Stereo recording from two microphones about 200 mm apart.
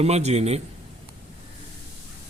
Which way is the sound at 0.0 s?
30° right (ahead or behind).